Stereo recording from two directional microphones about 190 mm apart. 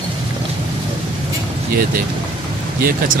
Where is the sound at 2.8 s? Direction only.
45° right (ahead or behind).